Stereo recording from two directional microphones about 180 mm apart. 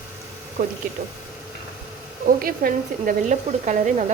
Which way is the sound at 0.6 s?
50° right (ahead or behind).